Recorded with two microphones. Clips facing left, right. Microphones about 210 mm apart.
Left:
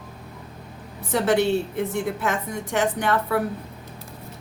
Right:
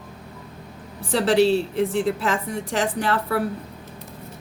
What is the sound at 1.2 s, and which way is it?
A woman's voice, 30° right (ahead or behind).